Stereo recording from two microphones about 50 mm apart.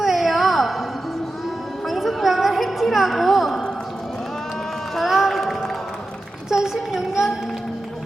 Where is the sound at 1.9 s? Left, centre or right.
Centre.